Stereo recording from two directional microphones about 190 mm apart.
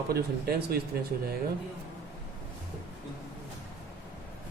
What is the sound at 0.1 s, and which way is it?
Speech, 55° right (ahead or behind).